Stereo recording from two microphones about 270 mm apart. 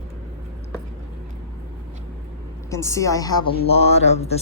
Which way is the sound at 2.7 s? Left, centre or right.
Centre.